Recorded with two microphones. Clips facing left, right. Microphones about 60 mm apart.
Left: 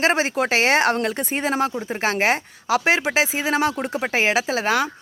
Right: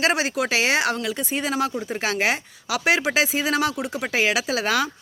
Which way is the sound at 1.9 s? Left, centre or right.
Left.